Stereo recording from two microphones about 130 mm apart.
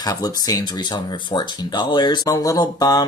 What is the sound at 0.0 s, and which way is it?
Speech, 30° left (ahead or behind).